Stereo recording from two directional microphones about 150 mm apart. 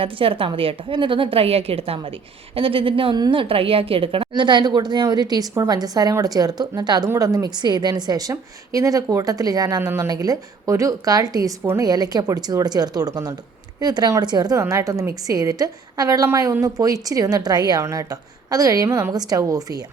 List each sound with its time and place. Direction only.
0.0 s a woman's voice: 35° right (ahead or behind)